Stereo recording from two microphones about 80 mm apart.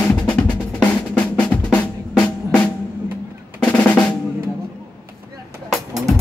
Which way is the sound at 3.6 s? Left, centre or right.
Centre.